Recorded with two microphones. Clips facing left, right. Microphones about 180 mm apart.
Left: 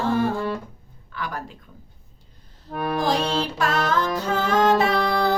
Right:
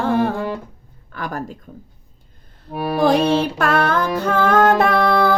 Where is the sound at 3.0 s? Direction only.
60° right (ahead or behind).